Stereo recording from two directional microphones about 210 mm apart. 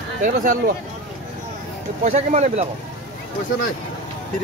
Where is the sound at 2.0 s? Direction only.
35° right (ahead or behind).